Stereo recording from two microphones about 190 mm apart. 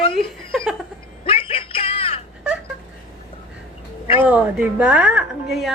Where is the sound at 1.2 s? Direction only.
30° left (ahead or behind).